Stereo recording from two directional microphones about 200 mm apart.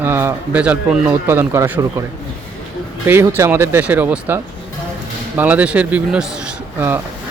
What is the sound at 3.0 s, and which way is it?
Speech, 10° right (ahead or behind).